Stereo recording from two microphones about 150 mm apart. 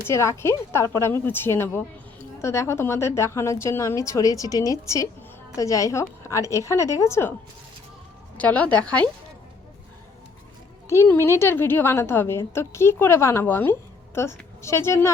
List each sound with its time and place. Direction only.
0.1 s a woman's voice: 20° left (ahead or behind)
8.4 s a woman's voice: 10° left (ahead or behind)
11.0 s a woman's voice: 15° left (ahead or behind)